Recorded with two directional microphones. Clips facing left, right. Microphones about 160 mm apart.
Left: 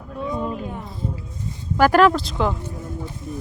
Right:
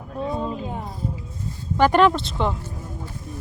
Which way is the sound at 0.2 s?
30° right (ahead or behind).